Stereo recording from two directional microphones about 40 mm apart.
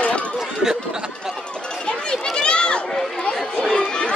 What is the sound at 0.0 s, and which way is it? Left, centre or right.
Chatter, left.